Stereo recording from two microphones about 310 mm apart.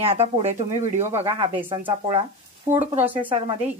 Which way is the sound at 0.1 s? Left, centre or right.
Centre.